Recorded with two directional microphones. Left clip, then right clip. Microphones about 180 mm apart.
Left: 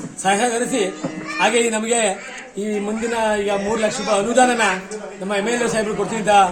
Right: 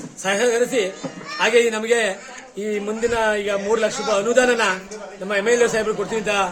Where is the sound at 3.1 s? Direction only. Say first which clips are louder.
Left 2 dB; 10° right (ahead or behind).